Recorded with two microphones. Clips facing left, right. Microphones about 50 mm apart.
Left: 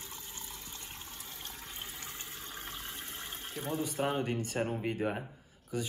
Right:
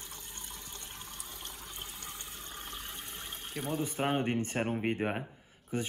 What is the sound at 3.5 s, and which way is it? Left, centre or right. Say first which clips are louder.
Speech: right 1 dB; right.